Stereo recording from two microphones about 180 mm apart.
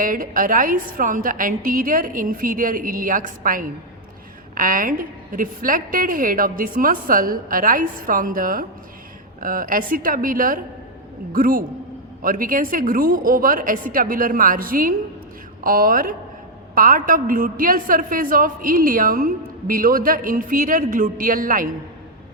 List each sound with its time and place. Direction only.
0.0 s a woman's voice: 50° right (ahead or behind)